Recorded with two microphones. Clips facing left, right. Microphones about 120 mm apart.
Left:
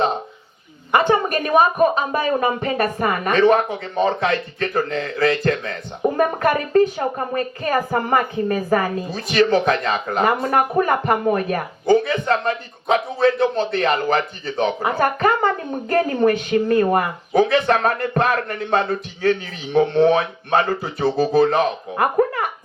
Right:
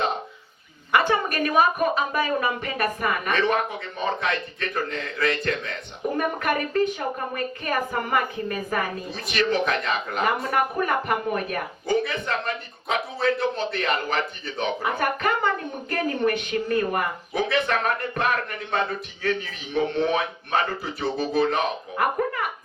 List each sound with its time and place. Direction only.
0.9 s a woman's voice: 25° left (ahead or behind)